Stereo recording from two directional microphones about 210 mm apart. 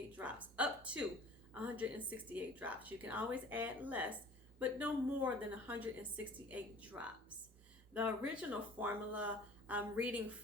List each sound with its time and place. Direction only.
0.2 s a woman's voice: 5° right (ahead or behind)